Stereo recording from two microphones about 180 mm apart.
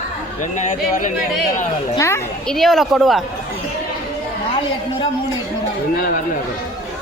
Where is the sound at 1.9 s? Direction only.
15° left (ahead or behind).